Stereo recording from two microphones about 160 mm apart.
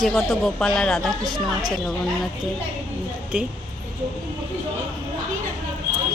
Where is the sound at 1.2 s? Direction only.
25° right (ahead or behind).